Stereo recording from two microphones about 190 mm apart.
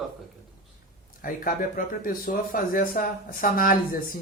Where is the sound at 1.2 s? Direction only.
45° left (ahead or behind).